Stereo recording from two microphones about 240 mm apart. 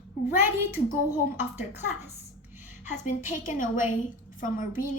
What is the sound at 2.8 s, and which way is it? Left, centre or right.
A woman's voice, left.